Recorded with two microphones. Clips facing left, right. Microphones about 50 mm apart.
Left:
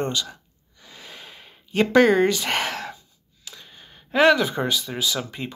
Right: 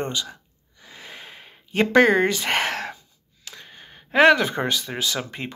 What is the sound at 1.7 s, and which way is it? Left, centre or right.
Speech, right.